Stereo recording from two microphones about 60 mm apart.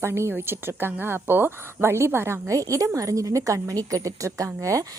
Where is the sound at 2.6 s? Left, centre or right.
Right.